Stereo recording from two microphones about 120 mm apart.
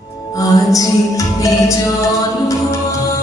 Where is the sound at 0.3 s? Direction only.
30° left (ahead or behind).